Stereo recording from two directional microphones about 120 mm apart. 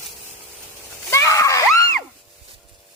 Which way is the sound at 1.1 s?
25° left (ahead or behind).